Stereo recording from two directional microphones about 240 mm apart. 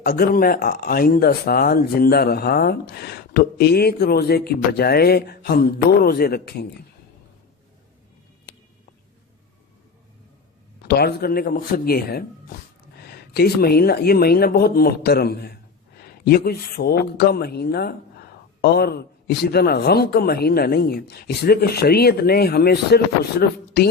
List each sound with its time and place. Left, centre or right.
0.0 s speech: left
10.8 s speech: left